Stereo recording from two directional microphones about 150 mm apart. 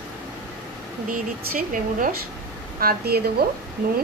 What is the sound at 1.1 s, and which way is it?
Speech, 65° right (ahead or behind).